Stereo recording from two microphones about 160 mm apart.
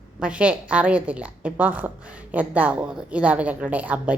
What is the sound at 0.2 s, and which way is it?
A woman's voice, 5° right (ahead or behind).